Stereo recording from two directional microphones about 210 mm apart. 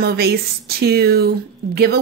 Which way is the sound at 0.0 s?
50° right (ahead or behind).